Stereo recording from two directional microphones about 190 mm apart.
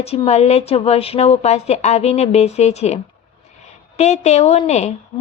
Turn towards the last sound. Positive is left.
turn(degrees=35)  # may be behind; listen again after turning